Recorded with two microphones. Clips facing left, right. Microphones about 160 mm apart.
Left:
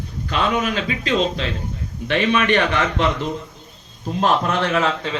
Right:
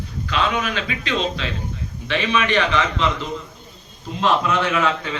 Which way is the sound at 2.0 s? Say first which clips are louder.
Left 3 dB; 55° left (ahead or behind).